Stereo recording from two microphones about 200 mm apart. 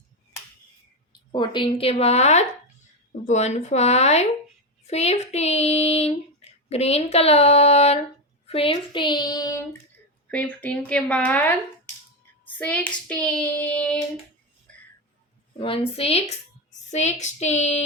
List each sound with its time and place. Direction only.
1.3 s child singing: 25° left (ahead or behind)
8.4 s a sound: 30° left (ahead or behind)
10.3 s speech: 5° left (ahead or behind)
12.5 s hands: 5° left (ahead or behind)
13.1 s speech: 5° left (ahead or behind)
15.5 s a sound: 25° left (ahead or behind)
16.9 s child singing: 35° left (ahead or behind)